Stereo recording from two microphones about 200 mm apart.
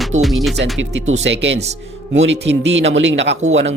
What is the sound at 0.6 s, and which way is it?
Speech, 65° right (ahead or behind).